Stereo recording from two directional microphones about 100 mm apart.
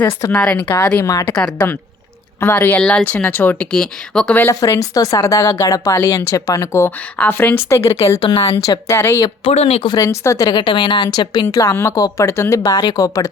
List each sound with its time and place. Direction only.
0.3 s speech: 15° left (ahead or behind)
2.8 s speech: 10° left (ahead or behind)
4.4 s speech: 30° left (ahead or behind)
7.2 s speech: 20° left (ahead or behind)
9.4 s speech: 90° left
9.8 s a woman's voice: 45° left (ahead or behind)
10.1 s speech: 30° left (ahead or behind)
10.5 s a woman's voice: 50° left (ahead or behind)
11.4 s speech: 30° left (ahead or behind)
12.6 s speech: 45° left (ahead or behind)